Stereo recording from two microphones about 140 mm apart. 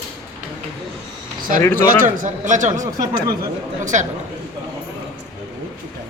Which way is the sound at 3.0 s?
25° right (ahead or behind).